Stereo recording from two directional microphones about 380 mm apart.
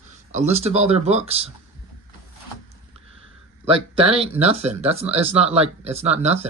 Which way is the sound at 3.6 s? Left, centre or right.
Centre.